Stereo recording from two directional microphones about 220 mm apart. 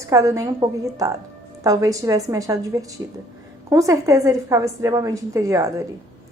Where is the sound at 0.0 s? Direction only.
15° right (ahead or behind).